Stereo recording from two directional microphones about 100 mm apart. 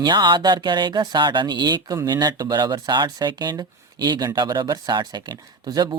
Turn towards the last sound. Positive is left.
turn(degrees=-40)  # may be behind; listen again after turning